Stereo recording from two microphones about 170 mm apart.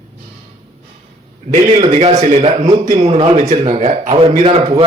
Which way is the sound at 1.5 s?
40° right (ahead or behind).